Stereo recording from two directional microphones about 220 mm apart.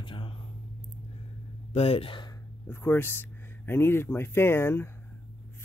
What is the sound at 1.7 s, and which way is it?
Speech, 25° left (ahead or behind).